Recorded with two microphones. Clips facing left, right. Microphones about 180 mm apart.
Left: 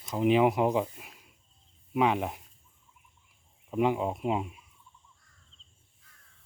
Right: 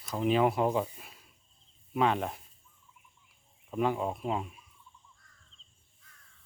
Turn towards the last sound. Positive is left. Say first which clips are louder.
# left 3 dB
turn(degrees=15)  # may be behind; listen again after turning